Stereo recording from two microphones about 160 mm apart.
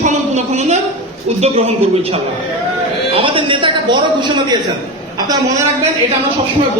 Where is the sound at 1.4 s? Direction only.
40° right (ahead or behind).